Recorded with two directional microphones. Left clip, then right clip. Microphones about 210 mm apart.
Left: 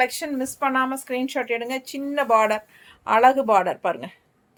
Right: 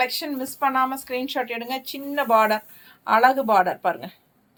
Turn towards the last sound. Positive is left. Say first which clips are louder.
# even
turn(degrees=30)  # may be behind; listen again after turning